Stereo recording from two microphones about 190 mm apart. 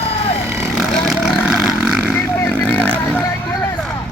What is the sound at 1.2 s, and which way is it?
Vehicle, 5° right (ahead or behind).